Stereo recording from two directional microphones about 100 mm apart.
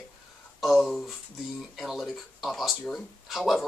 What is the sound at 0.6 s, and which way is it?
Speech, centre (ahead or behind).